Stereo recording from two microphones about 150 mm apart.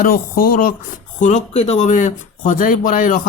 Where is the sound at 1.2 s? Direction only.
55° left (ahead or behind).